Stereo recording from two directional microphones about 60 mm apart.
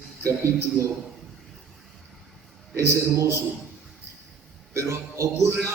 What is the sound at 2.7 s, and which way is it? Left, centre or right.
Speech, right.